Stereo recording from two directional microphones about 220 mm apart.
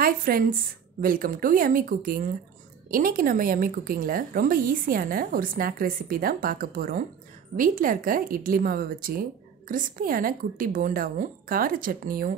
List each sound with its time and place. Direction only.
0.0 s a woman's voice: 40° right (ahead or behind)